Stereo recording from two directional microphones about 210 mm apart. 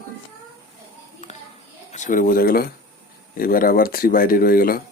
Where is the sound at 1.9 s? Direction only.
40° left (ahead or behind).